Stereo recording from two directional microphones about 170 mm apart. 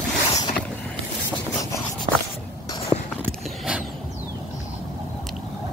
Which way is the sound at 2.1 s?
45° right (ahead or behind).